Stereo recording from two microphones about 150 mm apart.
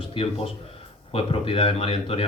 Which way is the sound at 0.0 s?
35° left (ahead or behind).